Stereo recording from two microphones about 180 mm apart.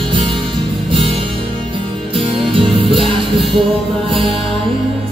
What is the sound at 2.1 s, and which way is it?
Music, 30° right (ahead or behind).